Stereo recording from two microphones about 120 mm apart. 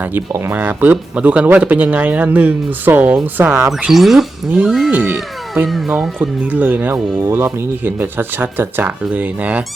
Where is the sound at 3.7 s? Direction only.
Centre (ahead or behind).